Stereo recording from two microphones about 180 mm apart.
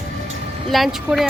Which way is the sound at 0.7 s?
Centre (ahead or behind).